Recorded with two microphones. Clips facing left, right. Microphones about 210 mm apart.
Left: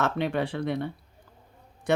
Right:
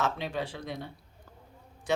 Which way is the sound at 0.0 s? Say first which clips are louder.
Left 5 dB; 60° left (ahead or behind).